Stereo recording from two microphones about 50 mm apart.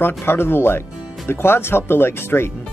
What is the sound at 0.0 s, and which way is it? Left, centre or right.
Speech, left.